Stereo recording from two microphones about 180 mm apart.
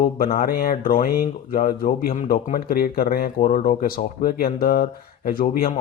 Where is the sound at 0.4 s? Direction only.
55° left (ahead or behind).